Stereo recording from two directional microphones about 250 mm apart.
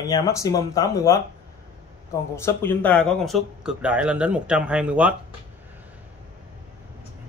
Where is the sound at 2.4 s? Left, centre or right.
Centre.